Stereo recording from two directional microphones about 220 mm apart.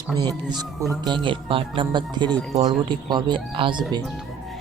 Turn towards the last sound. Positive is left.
turn(degrees=-25)  # may be behind; listen again after turning